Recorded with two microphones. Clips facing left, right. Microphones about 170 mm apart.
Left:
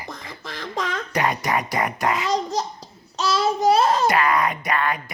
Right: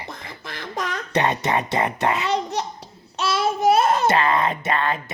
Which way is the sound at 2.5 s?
65° right (ahead or behind).